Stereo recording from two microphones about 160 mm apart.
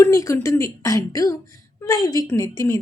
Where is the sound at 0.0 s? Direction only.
20° left (ahead or behind).